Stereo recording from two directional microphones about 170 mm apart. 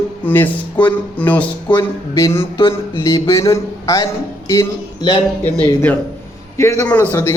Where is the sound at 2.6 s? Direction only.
30° left (ahead or behind).